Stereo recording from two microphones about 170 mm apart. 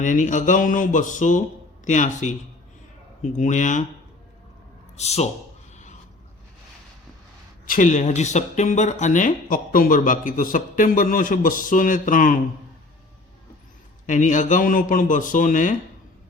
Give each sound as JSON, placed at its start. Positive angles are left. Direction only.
{"t": 0.0, "sound": "speech", "side_deg": 45}
{"t": 4.9, "sound": "a man's voice", "side_deg": 40}
{"t": 5.7, "sound": "a sound", "side_deg": 45}
{"t": 7.7, "sound": "speech", "side_deg": 50}
{"t": 14.1, "sound": "speech", "side_deg": 45}